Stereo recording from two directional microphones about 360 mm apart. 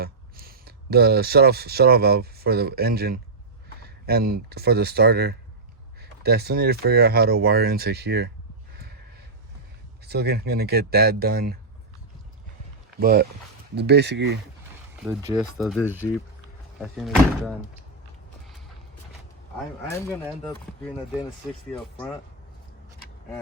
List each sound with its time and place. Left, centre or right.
0.0 s speech: right
10.0 s speech: right
13.0 s speech: right
15.0 s speech: centre
20.5 s speech: centre